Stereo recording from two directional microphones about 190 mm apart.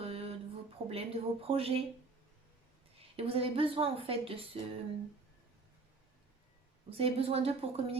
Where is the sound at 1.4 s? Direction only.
30° right (ahead or behind).